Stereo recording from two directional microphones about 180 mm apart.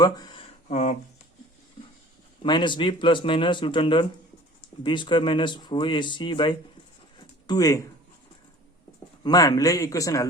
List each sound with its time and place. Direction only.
0.0 s speech: 25° left (ahead or behind)
0.7 s speech: 40° left (ahead or behind)
2.4 s speech: 25° left (ahead or behind)
9.2 s speech: 20° left (ahead or behind)